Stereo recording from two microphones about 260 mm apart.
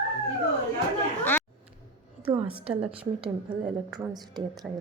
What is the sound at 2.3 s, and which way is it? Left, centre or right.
Speech, centre.